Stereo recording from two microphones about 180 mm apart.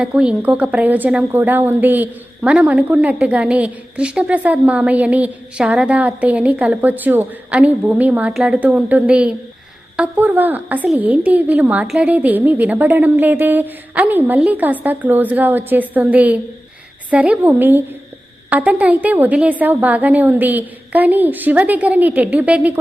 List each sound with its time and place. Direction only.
0.0 s a woman's voice: 5° right (ahead or behind)